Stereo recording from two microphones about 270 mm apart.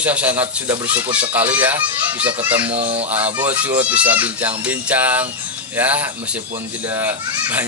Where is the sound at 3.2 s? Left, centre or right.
Centre.